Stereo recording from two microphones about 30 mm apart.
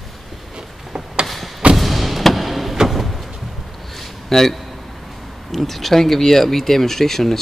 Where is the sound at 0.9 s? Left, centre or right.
Right.